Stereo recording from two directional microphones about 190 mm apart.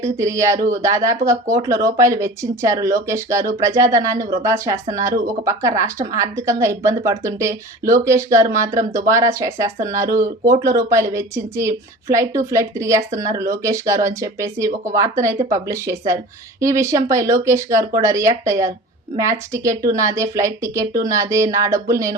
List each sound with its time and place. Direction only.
0.0 s speech: 15° right (ahead or behind)